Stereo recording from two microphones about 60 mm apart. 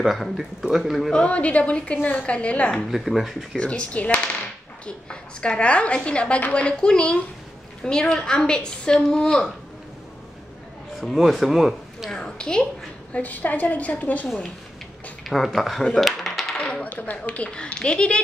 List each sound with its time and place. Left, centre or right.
0.0 s speech: centre
1.1 s speech: centre
2.0 s a woman's voice: left
2.2 s speech: centre
2.9 s speech: centre
3.5 s a woman's voice: centre
5.4 s a woman's voice: centre
11.0 s speech: centre
12.1 s a woman's voice: centre
13.1 s speech: left
15.2 s speech: centre
16.0 s coin: centre
16.5 s coin: centre
16.9 s speech: left